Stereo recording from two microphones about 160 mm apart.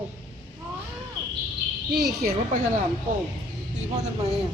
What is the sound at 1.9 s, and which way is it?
Speech, 80° right.